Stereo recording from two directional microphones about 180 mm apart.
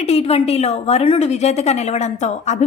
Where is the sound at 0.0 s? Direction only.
35° left (ahead or behind).